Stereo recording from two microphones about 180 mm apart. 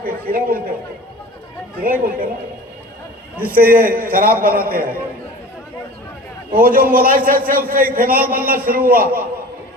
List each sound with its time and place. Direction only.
0.0 s a man's voice: 55° right (ahead or behind)
1.8 s a man's voice: 50° right (ahead or behind)
3.4 s a man's voice: 50° right (ahead or behind)
6.5 s a man's voice: 50° right (ahead or behind)